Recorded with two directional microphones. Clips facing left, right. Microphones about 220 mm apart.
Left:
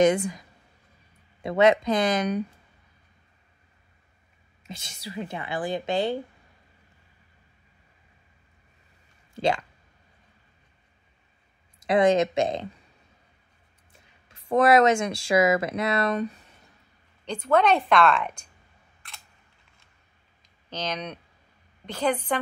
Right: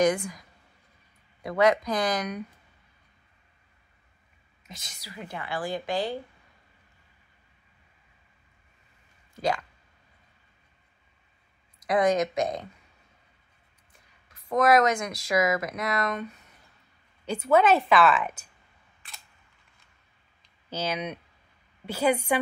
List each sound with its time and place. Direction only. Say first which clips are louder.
0.0 s speech: left 3 dB; 25° left (ahead or behind)
1.4 s speech: left 3 dB; 25° left (ahead or behind)
4.6 s speech: left 7 dB; 30° left (ahead or behind)
9.3 s speech: left 3 dB; 25° left (ahead or behind)
11.8 s speech: left 3 dB; 25° left (ahead or behind)
13.9 s speech: left 3 dB; 30° left (ahead or behind)
17.2 s a woman's voice: even; 5° right (ahead or behind)
20.7 s a woman's voice: right 1 dB; 5° right (ahead or behind)